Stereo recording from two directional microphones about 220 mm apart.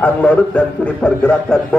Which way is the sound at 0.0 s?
5° left (ahead or behind).